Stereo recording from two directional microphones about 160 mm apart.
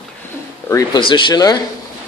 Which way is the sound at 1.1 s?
30° left (ahead or behind).